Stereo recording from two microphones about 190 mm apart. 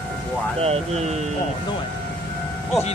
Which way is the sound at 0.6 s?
35° right (ahead or behind).